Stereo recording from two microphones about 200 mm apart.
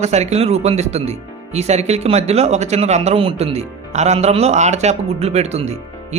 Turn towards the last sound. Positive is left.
turn(degrees=-35)  # may be behind; listen again after turning